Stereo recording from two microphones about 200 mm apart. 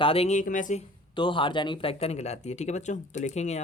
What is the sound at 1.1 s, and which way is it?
Speech, 25° left (ahead or behind).